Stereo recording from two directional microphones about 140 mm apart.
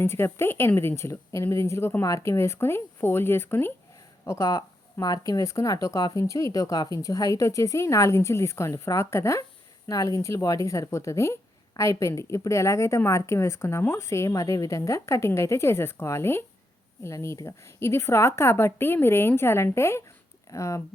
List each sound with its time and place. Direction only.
0.0 s a woman's voice: 15° left (ahead or behind)